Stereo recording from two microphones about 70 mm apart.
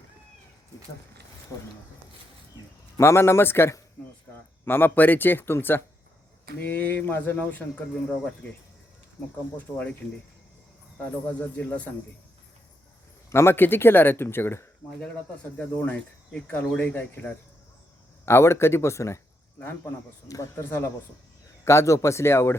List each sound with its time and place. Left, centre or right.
3.0 s speech: left
9.6 s speech: left
11.3 s speech: centre
13.3 s speech: left
15.8 s speech: left
18.3 s speech: left
19.5 s speech: left
20.2 s speech: left
20.6 s speech: left
21.6 s speech: left